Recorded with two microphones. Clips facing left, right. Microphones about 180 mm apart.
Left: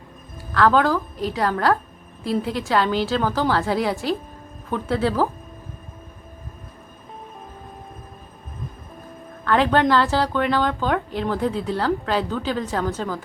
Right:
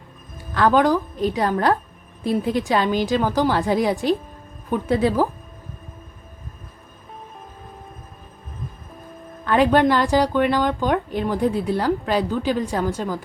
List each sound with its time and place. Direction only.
0.5 s speech: 15° right (ahead or behind)
9.4 s speech: 15° right (ahead or behind)